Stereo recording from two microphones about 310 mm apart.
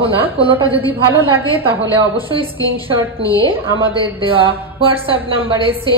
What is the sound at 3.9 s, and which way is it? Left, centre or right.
A woman's voice, centre.